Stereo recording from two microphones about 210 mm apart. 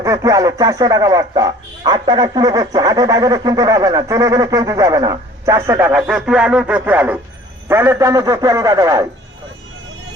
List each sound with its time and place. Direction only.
0.0 s speech: 15° right (ahead or behind)